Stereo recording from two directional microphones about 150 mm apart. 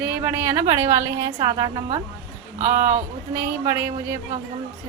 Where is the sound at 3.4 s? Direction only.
15° right (ahead or behind).